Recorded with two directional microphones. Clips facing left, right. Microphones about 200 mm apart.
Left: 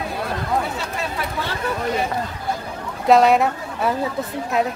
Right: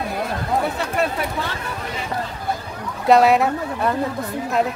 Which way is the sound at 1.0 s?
60° right (ahead or behind).